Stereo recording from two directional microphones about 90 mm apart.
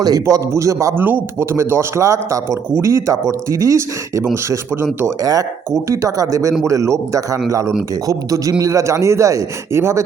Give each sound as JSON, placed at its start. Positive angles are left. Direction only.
{"t": 0.0, "sound": "a man's voice", "side_deg": -40}
{"t": 0.9, "sound": "a man's voice", "side_deg": -25}
{"t": 5.2, "sound": "a man's voice", "side_deg": -40}